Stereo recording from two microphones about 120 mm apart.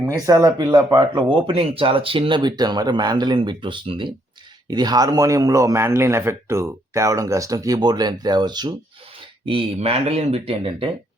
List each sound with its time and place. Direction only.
0.0 s a man's voice: 25° right (ahead or behind)
0.9 s a man's voice: 35° right (ahead or behind)
9.5 s speech: 50° right (ahead or behind)